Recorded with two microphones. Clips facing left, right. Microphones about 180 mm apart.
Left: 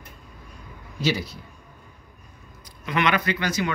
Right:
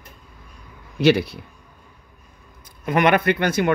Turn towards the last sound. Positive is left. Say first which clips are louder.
# right 6 dB
turn(degrees=-55)  # may be behind; listen again after turning